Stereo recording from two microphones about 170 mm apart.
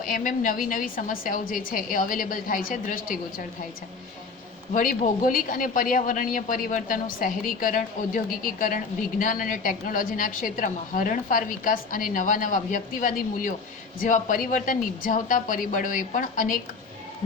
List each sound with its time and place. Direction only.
0.0 s speech: 50° left (ahead or behind)
4.7 s speech: 50° left (ahead or behind)